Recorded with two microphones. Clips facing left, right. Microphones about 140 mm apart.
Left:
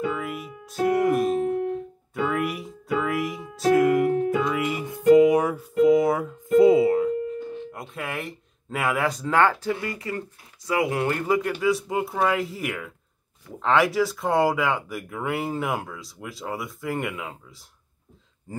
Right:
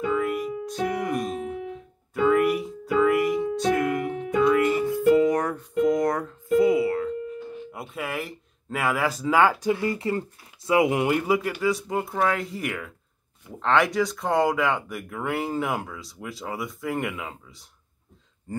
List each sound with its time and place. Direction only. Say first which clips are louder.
0.0 s music: right 4 dB; centre (ahead or behind)
6.6 s music: left 5 dB; 25° left (ahead or behind)
7.7 s speech: right 1 dB; 5° right (ahead or behind)